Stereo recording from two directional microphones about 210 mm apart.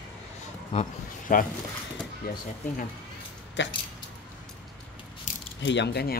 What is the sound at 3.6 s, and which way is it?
Speech, 60° left (ahead or behind).